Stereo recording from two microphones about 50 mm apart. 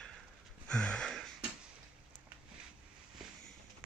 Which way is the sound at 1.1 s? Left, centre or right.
Centre.